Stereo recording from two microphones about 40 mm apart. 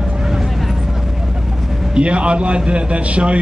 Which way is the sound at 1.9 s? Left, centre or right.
Right.